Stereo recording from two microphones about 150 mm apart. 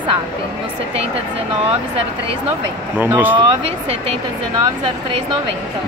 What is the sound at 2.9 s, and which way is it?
Speech, 15° right (ahead or behind).